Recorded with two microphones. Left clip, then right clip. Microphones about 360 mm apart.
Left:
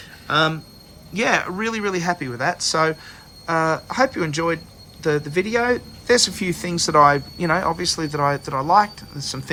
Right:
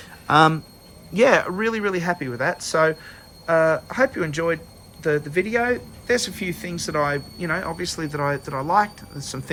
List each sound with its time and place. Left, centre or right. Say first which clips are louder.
0.3 s speech: right 3 dB; centre
1.1 s speech: right 3 dB; centre